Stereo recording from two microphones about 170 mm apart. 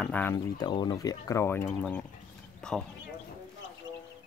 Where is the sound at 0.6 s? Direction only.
25° left (ahead or behind); by 2.8 s 5° left (ahead or behind).